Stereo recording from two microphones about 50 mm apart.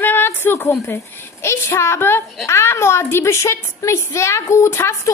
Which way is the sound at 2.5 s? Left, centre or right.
Left.